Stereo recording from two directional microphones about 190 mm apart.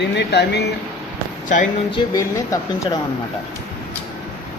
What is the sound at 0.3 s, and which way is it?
Speech, 60° left (ahead or behind).